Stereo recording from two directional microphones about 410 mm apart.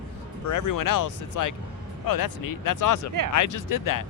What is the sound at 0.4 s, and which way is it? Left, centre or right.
Speech, left.